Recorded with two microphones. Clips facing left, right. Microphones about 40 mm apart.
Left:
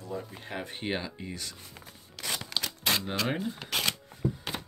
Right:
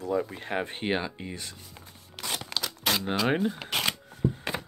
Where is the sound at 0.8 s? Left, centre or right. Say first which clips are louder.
Right 4 dB; right.